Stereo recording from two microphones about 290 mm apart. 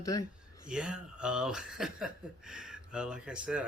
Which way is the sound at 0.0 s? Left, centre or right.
Centre.